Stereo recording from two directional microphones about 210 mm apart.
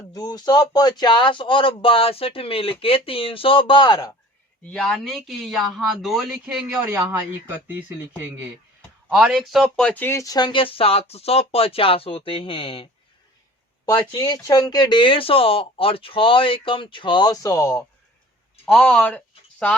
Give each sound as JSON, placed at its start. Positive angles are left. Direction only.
{"t": 0.1, "sound": "speech", "side_deg": 20}
{"t": 4.6, "sound": "speech", "side_deg": 5}
{"t": 13.9, "sound": "speech", "side_deg": 20}
{"t": 18.6, "sound": "speech", "side_deg": 5}